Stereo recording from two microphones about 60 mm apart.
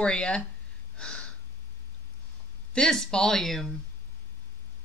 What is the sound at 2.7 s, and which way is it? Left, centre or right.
Speech, centre.